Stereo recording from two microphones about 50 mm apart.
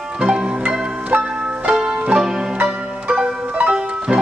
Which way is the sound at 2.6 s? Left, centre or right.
Right.